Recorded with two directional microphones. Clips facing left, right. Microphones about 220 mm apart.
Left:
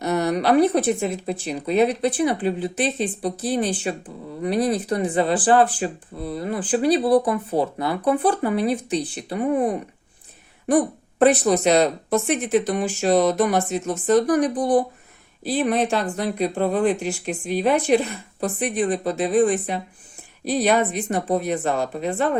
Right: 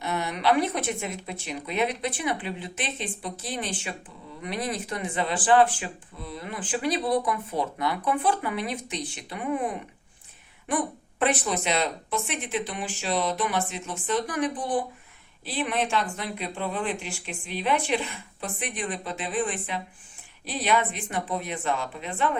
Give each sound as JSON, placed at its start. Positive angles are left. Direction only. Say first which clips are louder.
{"t": 0.0, "sound": "speech", "louder": "left 7 dB", "side_deg": 40}